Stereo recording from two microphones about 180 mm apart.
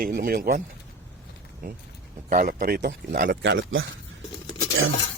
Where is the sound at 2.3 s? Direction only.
45° right (ahead or behind).